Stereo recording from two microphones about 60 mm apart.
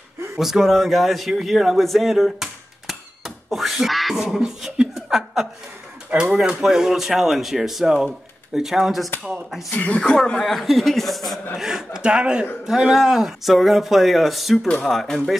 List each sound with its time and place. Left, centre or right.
0.4 s speech: centre
4.6 s laughter: centre
6.1 s speech: right
6.6 s speech: centre
9.7 s speech: left
10.3 s speech: centre